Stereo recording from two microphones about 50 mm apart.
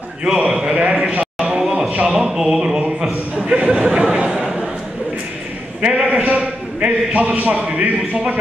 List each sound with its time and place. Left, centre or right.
0.5 s a man's voice: centre
0.7 s a sound: right
5.9 s a man's voice: right